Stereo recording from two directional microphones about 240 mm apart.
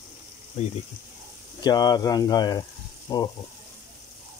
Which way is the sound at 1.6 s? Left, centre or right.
Centre.